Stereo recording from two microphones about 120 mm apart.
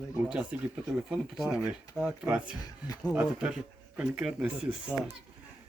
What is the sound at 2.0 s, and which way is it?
Speech, 10° right (ahead or behind).